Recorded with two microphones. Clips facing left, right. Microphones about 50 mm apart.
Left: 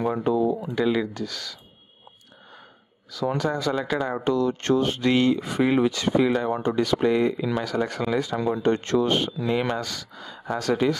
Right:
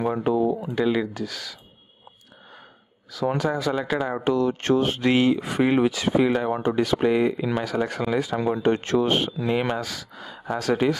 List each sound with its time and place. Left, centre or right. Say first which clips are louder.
0.2 s a sound: right 1 dB; right
0.6 s speech: even; centre
3.2 s speech: right 1 dB; right